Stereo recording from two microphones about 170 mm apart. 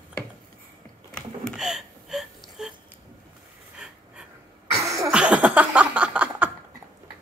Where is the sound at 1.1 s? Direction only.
Centre (ahead or behind).